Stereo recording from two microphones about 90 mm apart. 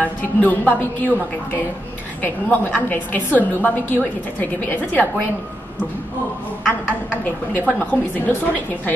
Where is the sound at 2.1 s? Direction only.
20° left (ahead or behind).